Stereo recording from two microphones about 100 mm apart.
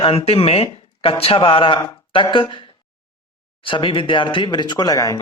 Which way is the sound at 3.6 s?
60° left (ahead or behind).